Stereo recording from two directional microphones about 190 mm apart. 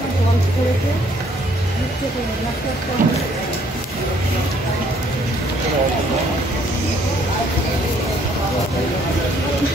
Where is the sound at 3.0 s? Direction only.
45° right (ahead or behind).